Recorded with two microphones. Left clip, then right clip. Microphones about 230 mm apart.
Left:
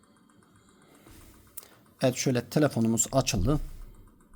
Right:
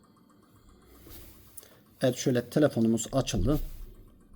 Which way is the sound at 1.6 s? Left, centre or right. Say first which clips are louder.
Left 1 dB; left.